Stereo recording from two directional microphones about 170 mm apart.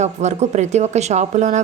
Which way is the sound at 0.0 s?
40° right (ahead or behind).